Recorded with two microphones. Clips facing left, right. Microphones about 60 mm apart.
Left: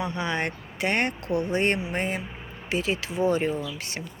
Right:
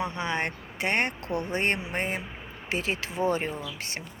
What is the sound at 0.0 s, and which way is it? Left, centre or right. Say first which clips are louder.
Speech: left 1 dB; right.